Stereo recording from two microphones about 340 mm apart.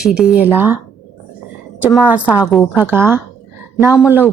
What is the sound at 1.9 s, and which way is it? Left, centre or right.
A woman's voice, centre.